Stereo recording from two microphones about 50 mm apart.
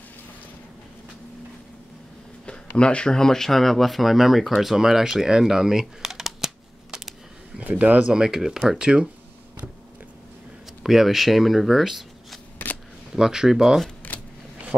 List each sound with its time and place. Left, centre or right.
2.8 s speech: centre
7.6 s speech: right
8.1 s speech: centre
10.8 s speech: centre
14.1 s a sound: left